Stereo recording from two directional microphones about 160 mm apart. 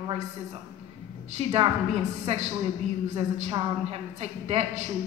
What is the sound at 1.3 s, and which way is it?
A woman's voice, 40° right (ahead or behind).